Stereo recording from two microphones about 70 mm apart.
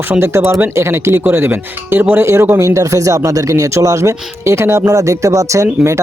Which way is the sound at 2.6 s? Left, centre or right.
Right.